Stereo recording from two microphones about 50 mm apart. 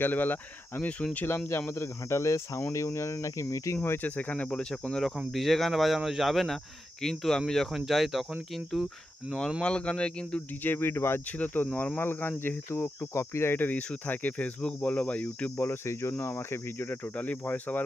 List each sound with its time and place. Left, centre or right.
0.0 s speech: left
1.8 s speech: left
4.0 s speech: left
4.5 s speech: centre
5.0 s speech: centre
7.7 s speech: centre
9.6 s speech: left
10.6 s speech: left
11.3 s speech: left
13.1 s speech: left
13.5 s speech: left
15.6 s cricket: left
17.2 s speech: left